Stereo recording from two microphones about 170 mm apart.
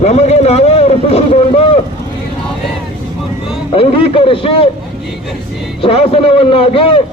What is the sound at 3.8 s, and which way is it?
Speech, 35° left (ahead or behind).